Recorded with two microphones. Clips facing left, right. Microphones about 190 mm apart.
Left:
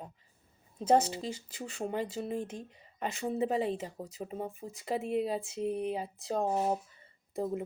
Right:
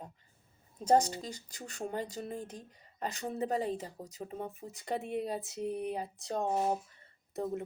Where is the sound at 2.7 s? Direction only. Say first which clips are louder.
Left 2 dB; 35° right (ahead or behind).